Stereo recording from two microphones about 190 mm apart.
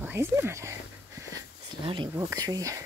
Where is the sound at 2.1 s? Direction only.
15° right (ahead or behind).